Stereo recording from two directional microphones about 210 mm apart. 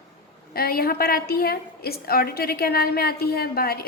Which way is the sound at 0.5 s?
45° left (ahead or behind).